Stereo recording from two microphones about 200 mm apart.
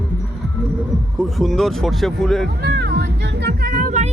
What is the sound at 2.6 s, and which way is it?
Music, 55° right (ahead or behind).